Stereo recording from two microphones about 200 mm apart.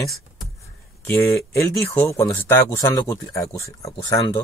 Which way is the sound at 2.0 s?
10° left (ahead or behind).